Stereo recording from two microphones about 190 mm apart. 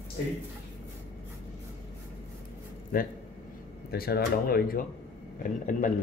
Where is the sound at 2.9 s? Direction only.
50° left (ahead or behind).